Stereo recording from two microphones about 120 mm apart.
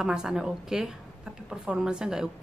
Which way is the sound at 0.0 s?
5° right (ahead or behind).